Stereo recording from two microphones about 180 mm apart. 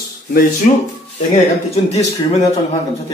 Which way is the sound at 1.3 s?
40° left (ahead or behind).